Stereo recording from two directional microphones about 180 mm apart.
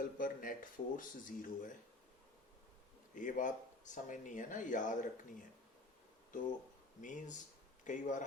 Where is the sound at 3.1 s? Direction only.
45° left (ahead or behind).